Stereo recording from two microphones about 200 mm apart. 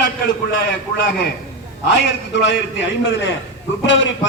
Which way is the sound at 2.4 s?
60° left (ahead or behind).